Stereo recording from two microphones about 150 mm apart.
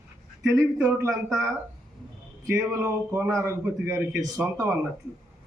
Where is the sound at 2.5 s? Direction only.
20° right (ahead or behind).